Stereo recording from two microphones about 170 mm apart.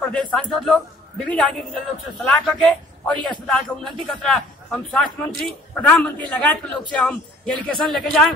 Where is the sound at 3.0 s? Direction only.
5° left (ahead or behind).